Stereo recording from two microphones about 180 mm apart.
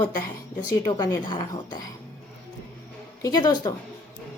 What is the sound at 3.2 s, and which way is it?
Speech, 20° left (ahead or behind).